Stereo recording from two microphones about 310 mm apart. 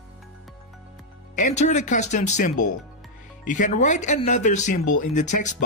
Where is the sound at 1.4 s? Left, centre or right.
Left.